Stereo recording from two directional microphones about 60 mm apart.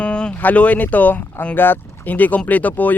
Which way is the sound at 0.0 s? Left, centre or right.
Centre.